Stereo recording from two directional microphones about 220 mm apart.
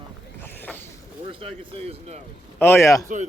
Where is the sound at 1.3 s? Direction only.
25° right (ahead or behind).